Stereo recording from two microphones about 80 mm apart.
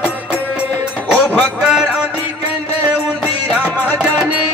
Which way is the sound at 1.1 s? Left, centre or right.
Centre.